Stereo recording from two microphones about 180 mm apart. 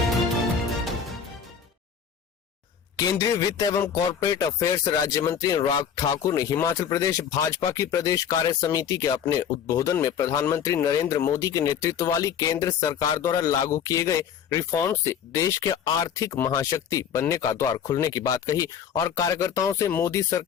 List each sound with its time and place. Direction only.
2.9 s speech: 20° left (ahead or behind)